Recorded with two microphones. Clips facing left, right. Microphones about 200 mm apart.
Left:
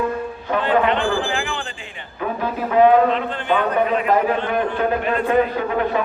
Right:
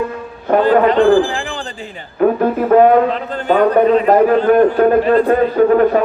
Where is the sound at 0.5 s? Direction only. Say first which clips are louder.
Right 8 dB; 40° right (ahead or behind).